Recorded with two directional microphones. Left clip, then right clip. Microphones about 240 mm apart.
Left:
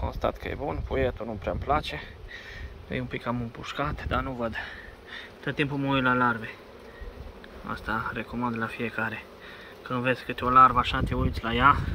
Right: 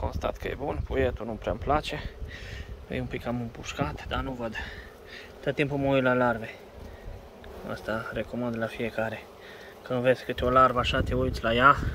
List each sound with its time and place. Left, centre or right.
0.0 s speech: centre
7.6 s speech: centre